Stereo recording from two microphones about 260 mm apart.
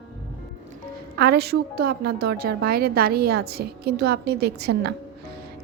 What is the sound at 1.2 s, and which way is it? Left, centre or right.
A woman's voice, right.